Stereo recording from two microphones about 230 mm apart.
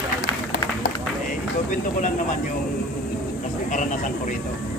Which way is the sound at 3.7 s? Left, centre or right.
Left.